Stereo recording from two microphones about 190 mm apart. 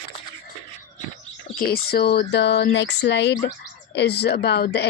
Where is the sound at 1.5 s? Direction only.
55° left (ahead or behind).